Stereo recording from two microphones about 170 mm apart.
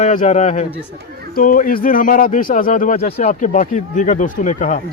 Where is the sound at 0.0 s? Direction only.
50° left (ahead or behind).